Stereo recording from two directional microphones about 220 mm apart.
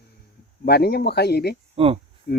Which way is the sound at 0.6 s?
45° left (ahead or behind).